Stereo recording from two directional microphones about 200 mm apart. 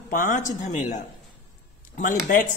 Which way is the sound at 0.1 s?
40° left (ahead or behind).